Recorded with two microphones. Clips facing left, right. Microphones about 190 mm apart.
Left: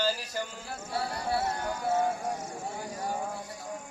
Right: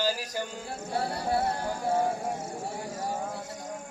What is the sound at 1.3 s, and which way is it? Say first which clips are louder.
Speech: right 2 dB; 35° right (ahead or behind).